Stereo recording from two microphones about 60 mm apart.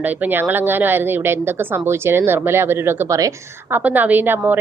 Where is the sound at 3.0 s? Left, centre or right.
Right.